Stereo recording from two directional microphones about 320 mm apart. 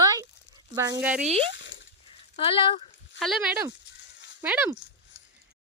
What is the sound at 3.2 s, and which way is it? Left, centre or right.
Speech, centre.